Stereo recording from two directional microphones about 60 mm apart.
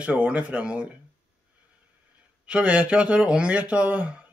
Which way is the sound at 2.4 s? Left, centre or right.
Right.